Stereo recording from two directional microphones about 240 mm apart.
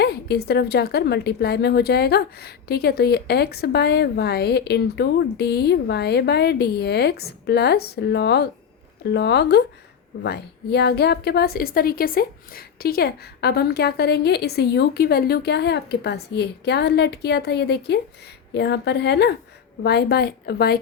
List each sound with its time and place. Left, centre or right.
0.0 s a woman's voice: left